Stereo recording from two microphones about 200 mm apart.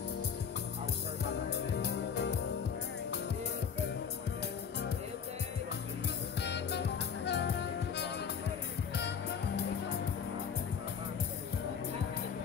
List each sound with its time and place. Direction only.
1.3 s music: 60° left (ahead or behind)
6.4 s music: 55° left (ahead or behind)